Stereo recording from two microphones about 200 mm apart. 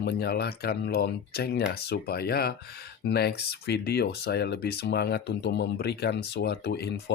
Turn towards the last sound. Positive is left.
turn(degrees=55)  # may be behind; listen again after turning